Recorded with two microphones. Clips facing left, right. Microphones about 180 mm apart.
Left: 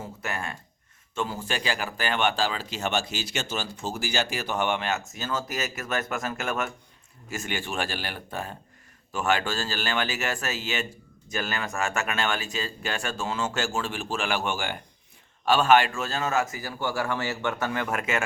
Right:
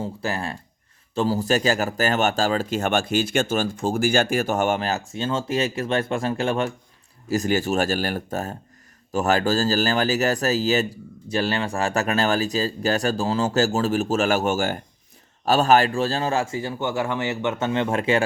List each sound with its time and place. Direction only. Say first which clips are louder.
0.0 s speech: right 6 dB; 30° right (ahead or behind)